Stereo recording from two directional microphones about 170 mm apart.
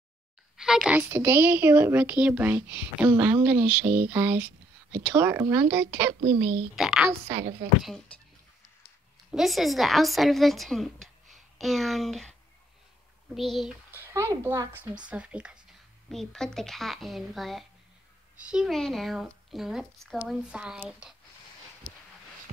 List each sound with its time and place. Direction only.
0.6 s a woman's voice: 5° right (ahead or behind)
6.4 s a woman's voice: 5° right (ahead or behind)
9.3 s a woman's voice: centre (ahead or behind)
13.3 s a woman's voice: centre (ahead or behind)
14.0 s a woman's voice: 15° right (ahead or behind)
15.0 s a woman's voice: 5° right (ahead or behind)